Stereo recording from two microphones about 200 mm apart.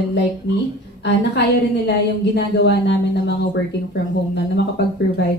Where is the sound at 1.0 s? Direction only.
60° left (ahead or behind).